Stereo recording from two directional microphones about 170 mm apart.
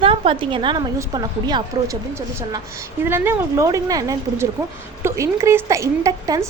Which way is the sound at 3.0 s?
15° right (ahead or behind).